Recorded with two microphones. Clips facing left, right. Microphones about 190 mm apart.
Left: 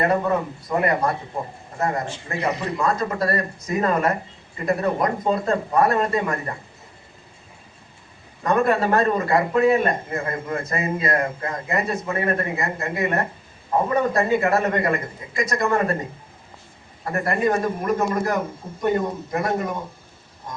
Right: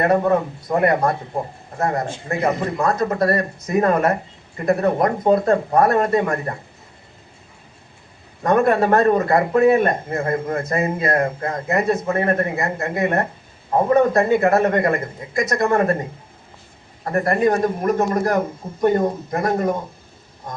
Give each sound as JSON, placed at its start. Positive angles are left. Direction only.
{"t": 0.0, "sound": "speech", "side_deg": -50}
{"t": 8.4, "sound": "speech", "side_deg": -50}
{"t": 17.1, "sound": "a man's voice", "side_deg": -40}